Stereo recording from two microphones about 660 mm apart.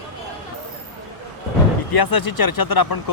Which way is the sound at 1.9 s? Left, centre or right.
Left.